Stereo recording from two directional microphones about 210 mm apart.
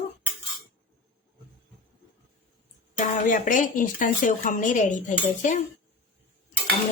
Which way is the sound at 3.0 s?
40° left (ahead or behind).